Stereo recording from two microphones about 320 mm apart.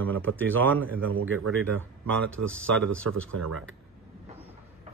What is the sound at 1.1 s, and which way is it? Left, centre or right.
Speech, right.